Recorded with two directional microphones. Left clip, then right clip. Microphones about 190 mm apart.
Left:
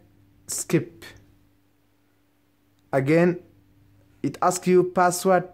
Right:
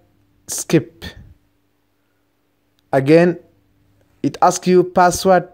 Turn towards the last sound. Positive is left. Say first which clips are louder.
# right 7 dB
turn(degrees=-20)  # may be behind; listen again after turning